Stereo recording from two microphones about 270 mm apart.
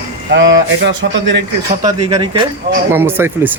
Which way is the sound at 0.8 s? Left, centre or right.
Right.